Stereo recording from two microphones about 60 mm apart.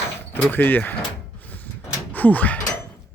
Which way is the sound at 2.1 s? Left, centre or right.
Left.